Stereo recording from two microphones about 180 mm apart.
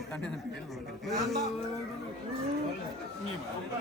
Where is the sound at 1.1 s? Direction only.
Centre (ahead or behind).